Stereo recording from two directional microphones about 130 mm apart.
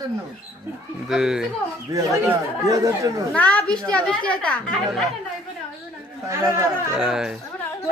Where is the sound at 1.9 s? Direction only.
25° right (ahead or behind).